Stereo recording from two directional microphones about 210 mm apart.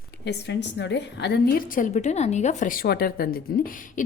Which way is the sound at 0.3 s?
55° left (ahead or behind).